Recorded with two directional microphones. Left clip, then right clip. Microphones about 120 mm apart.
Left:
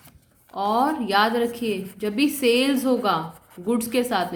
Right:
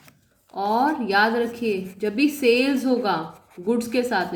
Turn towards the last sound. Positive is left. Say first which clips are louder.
# even
turn(degrees=35)  # may be behind; listen again after turning